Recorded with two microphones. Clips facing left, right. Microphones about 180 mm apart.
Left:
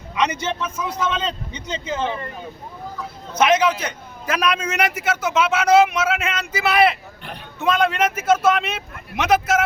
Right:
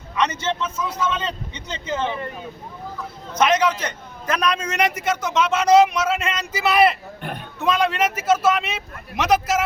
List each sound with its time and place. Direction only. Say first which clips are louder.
0.2 s a man's voice: even; 10° left (ahead or behind)
3.3 s a man's voice: left 1 dB; 5° left (ahead or behind)